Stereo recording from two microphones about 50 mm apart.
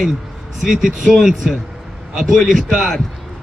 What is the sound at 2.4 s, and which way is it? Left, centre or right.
Speech, centre.